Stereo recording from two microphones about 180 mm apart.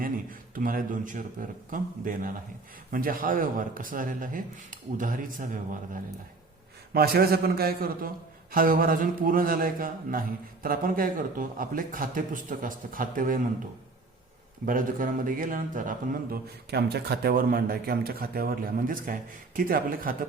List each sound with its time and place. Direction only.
0.0 s a man's voice: 50° right (ahead or behind)
6.9 s a man's voice: 60° right (ahead or behind)
14.7 s a man's voice: 50° right (ahead or behind)